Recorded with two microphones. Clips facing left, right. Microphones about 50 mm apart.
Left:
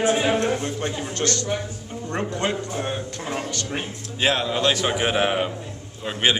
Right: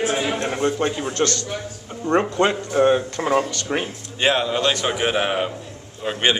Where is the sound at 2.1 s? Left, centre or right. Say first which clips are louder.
Right 7 dB; right.